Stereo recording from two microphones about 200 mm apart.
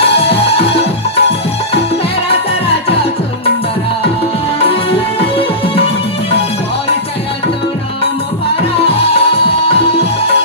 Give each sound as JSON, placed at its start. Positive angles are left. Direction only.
{"t": 0.0, "sound": "music", "side_deg": 30}
{"t": 8.7, "sound": "music", "side_deg": 30}